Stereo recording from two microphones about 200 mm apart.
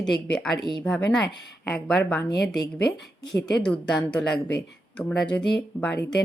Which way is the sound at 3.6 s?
5° left (ahead or behind).